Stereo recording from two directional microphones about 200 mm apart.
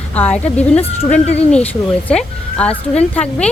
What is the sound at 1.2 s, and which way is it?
Speech, 30° left (ahead or behind).